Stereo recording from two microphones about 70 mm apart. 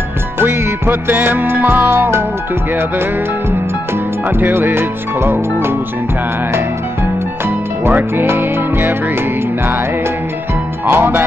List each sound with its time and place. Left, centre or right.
0.4 s music: right
4.4 s music: right
7.8 s music: right
10.9 s music: right